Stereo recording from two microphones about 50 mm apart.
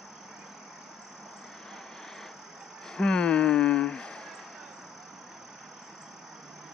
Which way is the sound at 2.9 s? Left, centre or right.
Centre.